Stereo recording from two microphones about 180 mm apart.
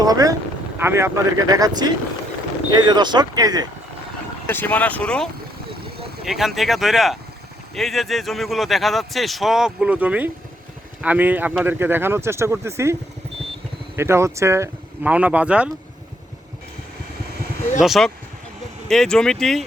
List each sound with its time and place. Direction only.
0.0 s speech: 20° right (ahead or behind)
4.4 s speech: 10° left (ahead or behind); by 15.7 s 5° right (ahead or behind)
17.7 s speech: centre (ahead or behind)